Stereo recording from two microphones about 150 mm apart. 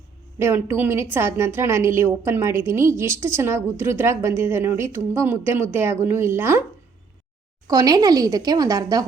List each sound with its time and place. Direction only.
0.3 s a woman's voice: 15° right (ahead or behind)
7.7 s speech: 25° right (ahead or behind)